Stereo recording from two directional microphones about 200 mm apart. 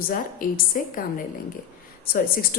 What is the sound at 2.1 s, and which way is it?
Speech, 45° left (ahead or behind).